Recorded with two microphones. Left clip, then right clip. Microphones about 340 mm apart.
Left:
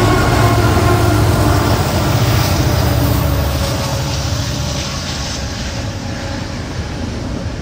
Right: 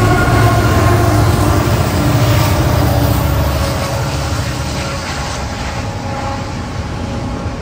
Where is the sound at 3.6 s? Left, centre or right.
Right.